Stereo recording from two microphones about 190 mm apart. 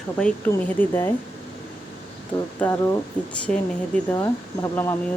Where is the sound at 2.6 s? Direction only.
10° left (ahead or behind).